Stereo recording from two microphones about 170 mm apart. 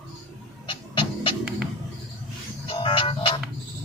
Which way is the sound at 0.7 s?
30° left (ahead or behind).